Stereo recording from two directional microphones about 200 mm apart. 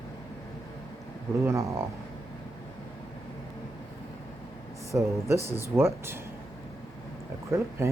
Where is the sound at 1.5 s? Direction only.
15° right (ahead or behind).